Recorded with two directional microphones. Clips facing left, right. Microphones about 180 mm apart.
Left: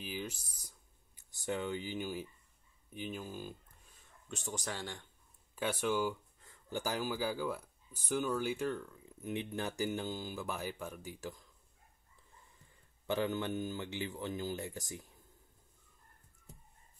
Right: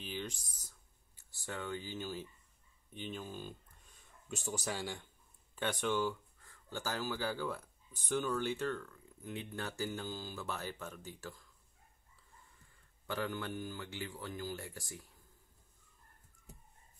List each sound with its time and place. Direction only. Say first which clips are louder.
0.0 s speech: left 1 dB; 5° left (ahead or behind)
6.4 s speech: left 3 dB; 20° left (ahead or behind)
13.0 s speech: left 5 dB; 20° left (ahead or behind)